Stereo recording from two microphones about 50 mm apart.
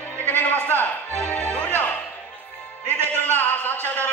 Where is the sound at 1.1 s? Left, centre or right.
Left.